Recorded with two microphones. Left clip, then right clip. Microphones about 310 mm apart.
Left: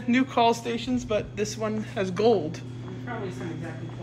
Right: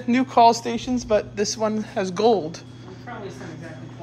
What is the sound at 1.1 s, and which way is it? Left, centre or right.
Speech, right.